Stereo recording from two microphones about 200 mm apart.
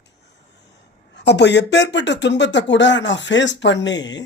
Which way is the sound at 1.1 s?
60° left (ahead or behind).